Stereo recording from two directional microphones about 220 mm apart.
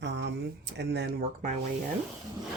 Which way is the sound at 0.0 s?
55° right (ahead or behind).